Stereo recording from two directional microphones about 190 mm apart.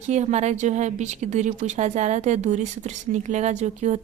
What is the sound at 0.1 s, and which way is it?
A woman's voice, 35° right (ahead or behind).